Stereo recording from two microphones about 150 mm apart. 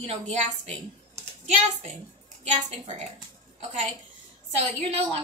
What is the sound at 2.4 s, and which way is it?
Speech, 50° right (ahead or behind).